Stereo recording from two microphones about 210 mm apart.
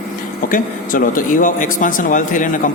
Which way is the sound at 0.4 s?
40° left (ahead or behind).